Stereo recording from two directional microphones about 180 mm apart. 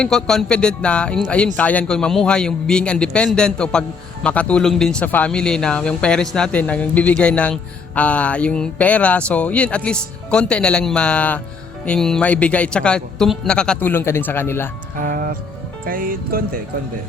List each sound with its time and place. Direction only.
0.0 s a man's voice: 5° left (ahead or behind)
14.9 s music: 50° right (ahead or behind)
15.9 s speech: 50° right (ahead or behind)